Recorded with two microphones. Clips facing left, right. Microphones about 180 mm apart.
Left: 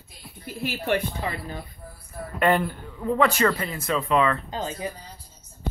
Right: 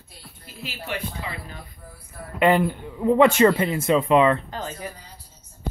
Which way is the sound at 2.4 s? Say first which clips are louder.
Right 3 dB; 15° right (ahead or behind).